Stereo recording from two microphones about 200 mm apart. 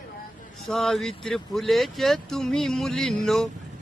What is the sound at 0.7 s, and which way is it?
Speech, centre (ahead or behind).